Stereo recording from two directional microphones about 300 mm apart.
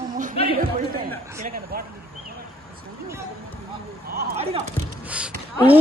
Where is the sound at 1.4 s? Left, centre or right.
Right.